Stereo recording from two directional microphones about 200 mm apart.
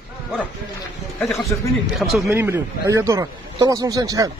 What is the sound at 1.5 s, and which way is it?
Speech, 10° left (ahead or behind).